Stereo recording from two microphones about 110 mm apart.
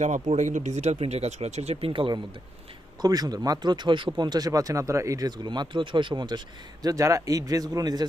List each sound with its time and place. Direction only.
0.0 s speech: 90° right; by 2.2 s 50° right (ahead or behind)
3.0 s speech: 35° right (ahead or behind)
6.8 s speech: 30° right (ahead or behind)